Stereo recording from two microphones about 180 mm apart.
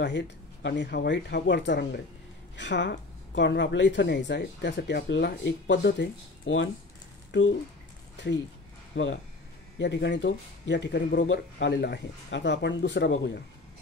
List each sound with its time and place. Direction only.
0.0 s a woman's voice: 80° left
7.3 s a woman's voice: 80° left
8.9 s speech: 90° left
9.8 s speech: 75° left (ahead or behind)